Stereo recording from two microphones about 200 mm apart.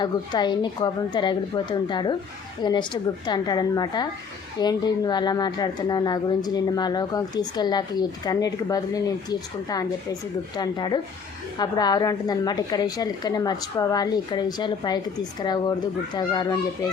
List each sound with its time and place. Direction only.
0.0 s a woman's voice: 20° left (ahead or behind)